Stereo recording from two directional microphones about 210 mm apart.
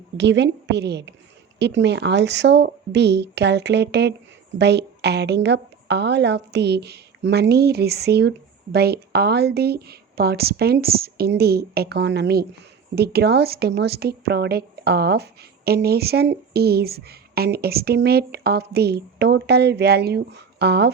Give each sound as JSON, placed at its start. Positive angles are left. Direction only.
{"t": 0.2, "sound": "speech", "side_deg": -55}